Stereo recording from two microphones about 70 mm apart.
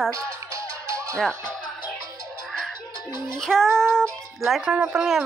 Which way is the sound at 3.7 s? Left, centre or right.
Centre.